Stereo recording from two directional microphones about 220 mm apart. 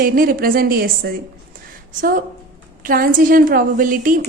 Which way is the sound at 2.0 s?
40° right (ahead or behind).